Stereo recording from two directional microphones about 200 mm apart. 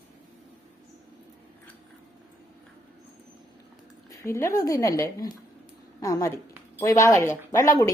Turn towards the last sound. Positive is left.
turn(degrees=15)  # may be behind; listen again after turning